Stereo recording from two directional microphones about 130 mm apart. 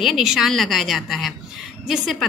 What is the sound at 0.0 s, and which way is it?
A woman's voice, centre (ahead or behind).